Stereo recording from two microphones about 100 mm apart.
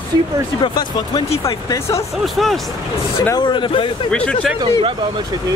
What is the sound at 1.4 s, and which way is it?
Speech, 30° left (ahead or behind).